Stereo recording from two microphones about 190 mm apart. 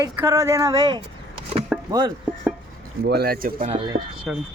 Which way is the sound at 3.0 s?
55° right (ahead or behind).